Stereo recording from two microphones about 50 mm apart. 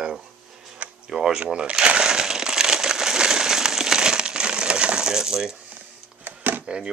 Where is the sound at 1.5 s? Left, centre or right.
Centre.